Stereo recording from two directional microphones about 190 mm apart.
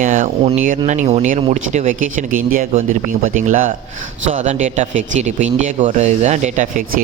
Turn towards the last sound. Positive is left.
turn(degrees=-40)  # may be behind; listen again after turning